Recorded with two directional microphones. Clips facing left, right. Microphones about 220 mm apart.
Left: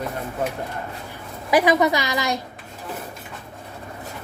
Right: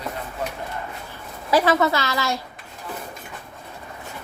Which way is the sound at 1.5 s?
15° left (ahead or behind).